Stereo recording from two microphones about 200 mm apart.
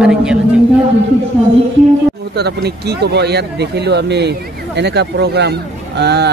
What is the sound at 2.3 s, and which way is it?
Speech, 55° right (ahead or behind).